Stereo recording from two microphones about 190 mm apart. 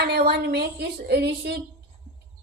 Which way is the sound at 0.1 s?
60° right (ahead or behind).